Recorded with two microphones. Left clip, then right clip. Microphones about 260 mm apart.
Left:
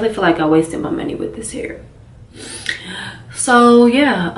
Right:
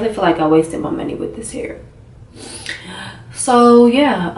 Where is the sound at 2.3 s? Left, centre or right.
Centre.